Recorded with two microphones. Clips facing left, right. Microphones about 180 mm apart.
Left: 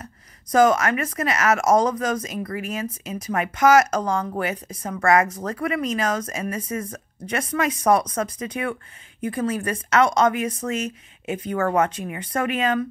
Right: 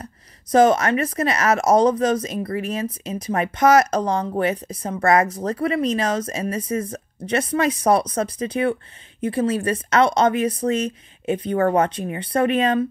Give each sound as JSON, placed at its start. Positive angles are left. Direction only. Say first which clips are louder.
{"t": 0.0, "sound": "a woman's voice", "louder": "right 3 dB", "side_deg": -30}